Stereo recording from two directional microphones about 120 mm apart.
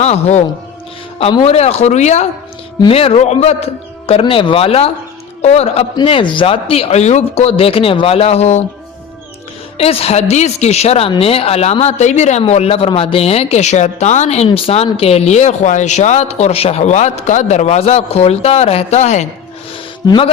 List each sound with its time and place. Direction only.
0.0 s a man's voice: 65° left (ahead or behind)
2.9 s a man's voice: 55° left (ahead or behind)
6.0 s speech: 45° left (ahead or behind); by 8.6 s 65° left (ahead or behind)
9.7 s speech: 55° left (ahead or behind); by 19.3 s 70° left (ahead or behind)
20.1 s speech: 45° left (ahead or behind)